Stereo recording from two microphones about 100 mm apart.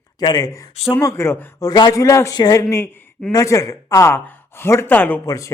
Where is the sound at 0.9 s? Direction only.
25° left (ahead or behind).